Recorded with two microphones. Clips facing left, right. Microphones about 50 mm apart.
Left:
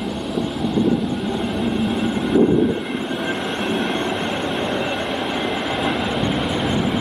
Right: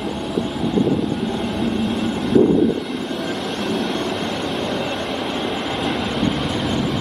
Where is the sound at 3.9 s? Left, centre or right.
Left.